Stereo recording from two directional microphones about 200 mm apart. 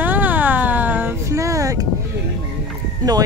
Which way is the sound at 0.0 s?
10° right (ahead or behind).